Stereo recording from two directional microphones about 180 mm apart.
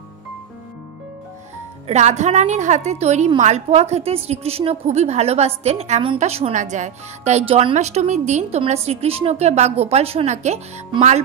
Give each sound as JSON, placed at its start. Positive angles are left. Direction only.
{"t": 1.9, "sound": "a woman's voice", "side_deg": -40}